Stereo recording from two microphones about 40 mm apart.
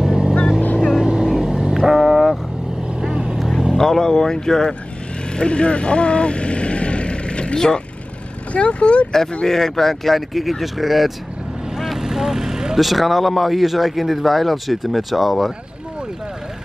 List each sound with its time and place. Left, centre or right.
0.0 s vehicle: centre
0.7 s vehicle: centre
1.3 s vehicle: centre
3.0 s vehicle: centre
3.3 s vehicle: centre
3.7 s speech: centre
5.3 s vehicle: left
8.5 s speech: left
9.5 s speech: centre
11.7 s vehicle: centre
12.8 s speech: centre